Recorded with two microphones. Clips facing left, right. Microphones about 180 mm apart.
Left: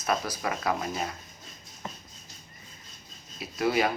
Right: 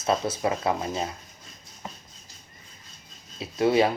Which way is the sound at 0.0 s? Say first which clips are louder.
Right 4 dB; 25° right (ahead or behind).